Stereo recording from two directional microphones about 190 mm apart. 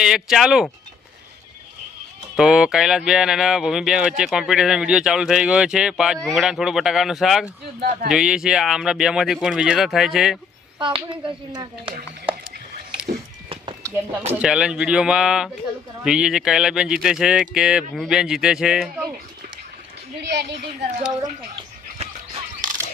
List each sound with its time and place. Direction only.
0.0 s speech: centre (ahead or behind)
2.3 s speech: 5° right (ahead or behind)
7.8 s speech: 45° right (ahead or behind)
8.1 s speech: 5° right (ahead or behind)
10.8 s speech: 25° right (ahead or behind)
13.5 s a sound: 25° right (ahead or behind)
14.3 s speech: 5° right (ahead or behind)
20.3 s speech: 60° right (ahead or behind)